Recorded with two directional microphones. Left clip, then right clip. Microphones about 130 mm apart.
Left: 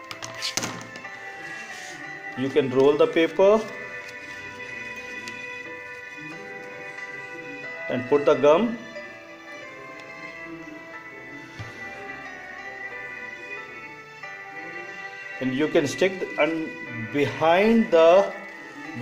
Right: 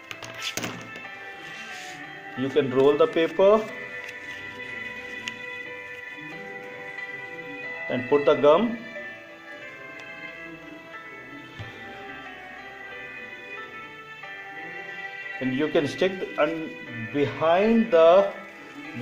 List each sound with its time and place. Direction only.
2.4 s speech: centre (ahead or behind)
7.6 s music: 30° left (ahead or behind)
8.1 s speech: centre (ahead or behind)
15.4 s speech: 5° left (ahead or behind)
17.1 s speech: 10° left (ahead or behind)
17.8 s speech: centre (ahead or behind)